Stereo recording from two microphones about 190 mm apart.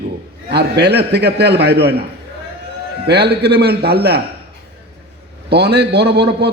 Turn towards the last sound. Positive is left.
turn(degrees=-60)  # may be behind; listen again after turning